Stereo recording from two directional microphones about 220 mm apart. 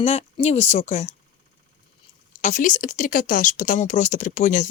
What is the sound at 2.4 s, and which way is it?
Speech, 35° left (ahead or behind).